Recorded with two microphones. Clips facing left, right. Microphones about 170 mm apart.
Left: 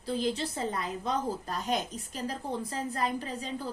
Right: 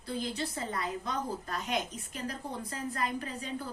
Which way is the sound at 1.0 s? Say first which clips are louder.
Left 4 dB; 35° left (ahead or behind).